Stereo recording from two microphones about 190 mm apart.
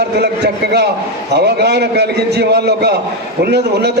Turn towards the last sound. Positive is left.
turn(degrees=-60)  # may be behind; listen again after turning